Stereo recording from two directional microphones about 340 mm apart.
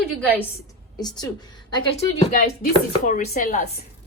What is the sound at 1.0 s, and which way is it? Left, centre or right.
A woman's voice, centre.